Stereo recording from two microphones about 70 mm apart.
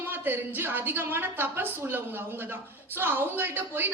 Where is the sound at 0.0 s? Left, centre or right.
Right.